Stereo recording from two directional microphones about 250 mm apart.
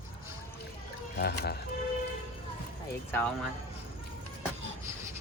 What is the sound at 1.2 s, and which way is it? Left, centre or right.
Speech, left.